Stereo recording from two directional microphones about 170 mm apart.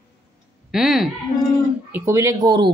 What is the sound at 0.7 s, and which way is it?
Speech, centre (ahead or behind).